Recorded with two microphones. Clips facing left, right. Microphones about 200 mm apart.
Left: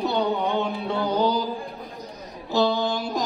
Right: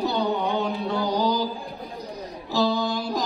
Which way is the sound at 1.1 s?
35° right (ahead or behind).